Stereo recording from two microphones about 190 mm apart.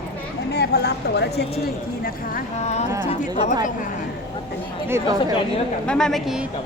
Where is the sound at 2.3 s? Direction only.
35° left (ahead or behind).